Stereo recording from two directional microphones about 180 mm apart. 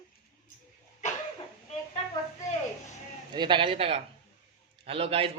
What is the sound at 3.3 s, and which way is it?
A man's voice, 25° right (ahead or behind).